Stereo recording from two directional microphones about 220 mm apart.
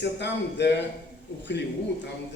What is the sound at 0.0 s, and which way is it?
Speech, 50° left (ahead or behind).